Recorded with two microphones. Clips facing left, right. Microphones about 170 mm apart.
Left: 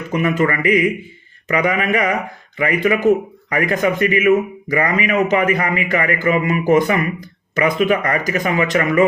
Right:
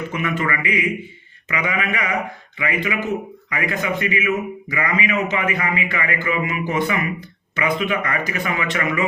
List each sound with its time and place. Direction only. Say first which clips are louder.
0.1 s a man's voice: left 10 dB; 35° left (ahead or behind)